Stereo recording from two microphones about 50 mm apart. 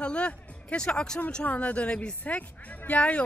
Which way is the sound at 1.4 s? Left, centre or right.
Left.